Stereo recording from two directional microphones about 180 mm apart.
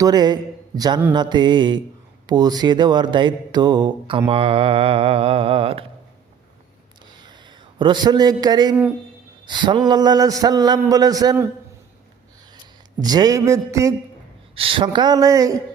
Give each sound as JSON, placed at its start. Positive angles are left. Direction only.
{"t": 0.0, "sound": "a man's voice", "side_deg": -25}
{"t": 4.3, "sound": "mantra", "side_deg": -30}
{"t": 7.8, "sound": "a man's voice", "side_deg": -25}
{"t": 13.0, "sound": "speech", "side_deg": -20}
{"t": 14.5, "sound": "a man's voice", "side_deg": -30}